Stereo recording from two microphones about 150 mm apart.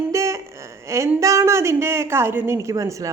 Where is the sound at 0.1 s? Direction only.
20° right (ahead or behind).